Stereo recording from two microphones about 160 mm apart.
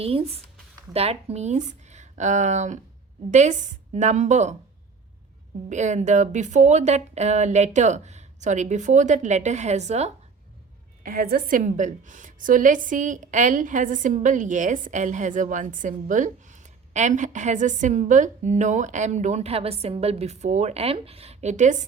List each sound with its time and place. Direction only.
0.0 s a woman's voice: 35° right (ahead or behind)
5.6 s a woman's voice: 50° right (ahead or behind)
11.0 s a woman's voice: 60° right (ahead or behind)